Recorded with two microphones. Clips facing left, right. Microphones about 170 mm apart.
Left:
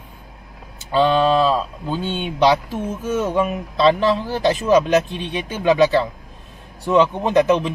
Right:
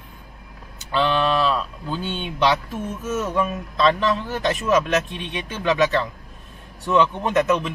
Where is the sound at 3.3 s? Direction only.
15° left (ahead or behind).